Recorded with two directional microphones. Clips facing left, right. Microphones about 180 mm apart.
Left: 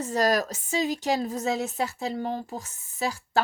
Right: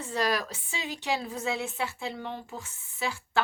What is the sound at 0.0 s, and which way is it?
A woman's voice, 40° left (ahead or behind).